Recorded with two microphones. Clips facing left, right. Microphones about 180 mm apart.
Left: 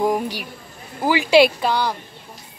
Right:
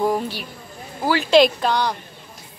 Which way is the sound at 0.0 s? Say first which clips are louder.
Left 1 dB; 15° left (ahead or behind).